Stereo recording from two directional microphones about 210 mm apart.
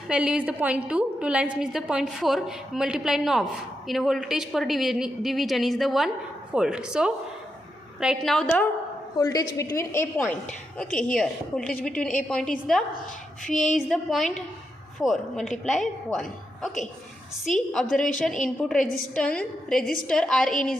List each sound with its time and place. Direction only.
0.1 s a woman's voice: 5° right (ahead or behind)
9.1 s a woman's voice: 15° left (ahead or behind)